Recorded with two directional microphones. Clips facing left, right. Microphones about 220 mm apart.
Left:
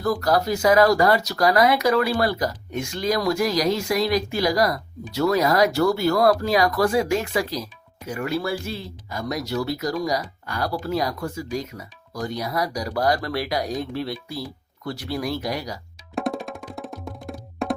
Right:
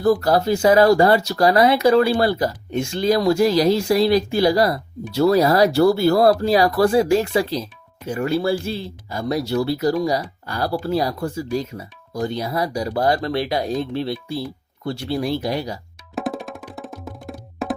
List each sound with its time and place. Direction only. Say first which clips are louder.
0.0 s speech: right 5 dB; 30° right (ahead or behind)
16.1 s music: even; centre (ahead or behind)